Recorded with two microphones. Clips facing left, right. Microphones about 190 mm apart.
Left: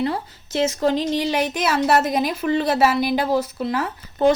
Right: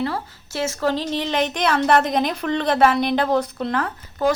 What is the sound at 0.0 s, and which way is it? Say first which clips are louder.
Speech: left 2 dB; 20° left (ahead or behind).